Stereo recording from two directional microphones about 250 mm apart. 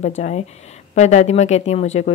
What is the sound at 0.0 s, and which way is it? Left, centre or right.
Speech, left.